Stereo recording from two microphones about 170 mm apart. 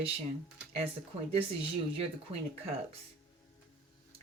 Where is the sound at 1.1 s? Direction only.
35° right (ahead or behind).